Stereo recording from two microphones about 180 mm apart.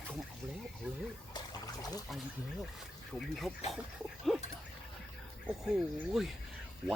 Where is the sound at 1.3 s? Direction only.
20° left (ahead or behind).